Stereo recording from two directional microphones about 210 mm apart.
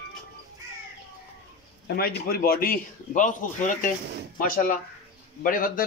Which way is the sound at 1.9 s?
45° left (ahead or behind).